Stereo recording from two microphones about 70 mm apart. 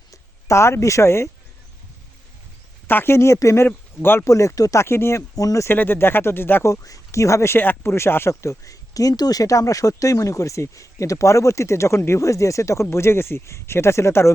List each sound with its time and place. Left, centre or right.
0.1 s speech: left
2.8 s speech: left
4.3 s speech: left
5.4 s speech: left
5.6 s speech: left
6.7 s speech: left